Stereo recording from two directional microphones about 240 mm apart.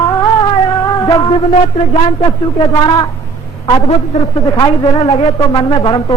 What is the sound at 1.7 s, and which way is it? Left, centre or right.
A man's voice, centre.